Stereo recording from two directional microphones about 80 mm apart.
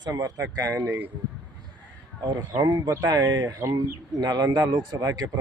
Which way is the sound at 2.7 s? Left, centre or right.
Right.